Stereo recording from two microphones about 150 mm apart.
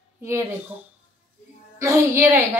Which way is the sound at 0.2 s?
20° right (ahead or behind).